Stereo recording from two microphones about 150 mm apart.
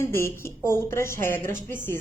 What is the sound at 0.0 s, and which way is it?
A woman's voice, 15° left (ahead or behind).